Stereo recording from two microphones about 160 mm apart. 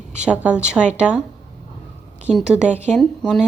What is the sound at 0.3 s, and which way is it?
Speech, 5° right (ahead or behind).